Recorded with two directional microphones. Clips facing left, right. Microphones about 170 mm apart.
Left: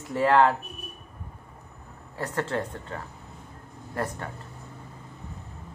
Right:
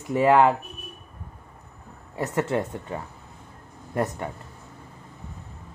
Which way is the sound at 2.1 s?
15° right (ahead or behind).